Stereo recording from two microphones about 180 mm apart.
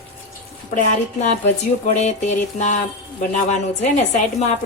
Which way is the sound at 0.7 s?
45° left (ahead or behind).